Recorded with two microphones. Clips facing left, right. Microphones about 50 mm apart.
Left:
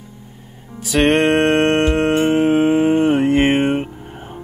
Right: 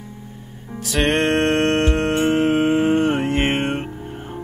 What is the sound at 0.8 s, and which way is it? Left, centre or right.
Music, centre.